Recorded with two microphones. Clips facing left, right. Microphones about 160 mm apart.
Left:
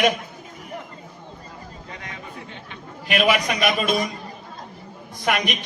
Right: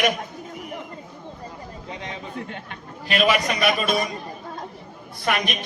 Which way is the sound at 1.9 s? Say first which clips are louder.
Right 5 dB; 25° right (ahead or behind).